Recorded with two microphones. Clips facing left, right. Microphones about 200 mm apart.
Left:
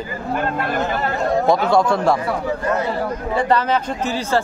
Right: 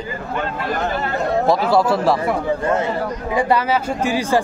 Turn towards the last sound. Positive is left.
turn(degrees=-10)  # may be behind; listen again after turning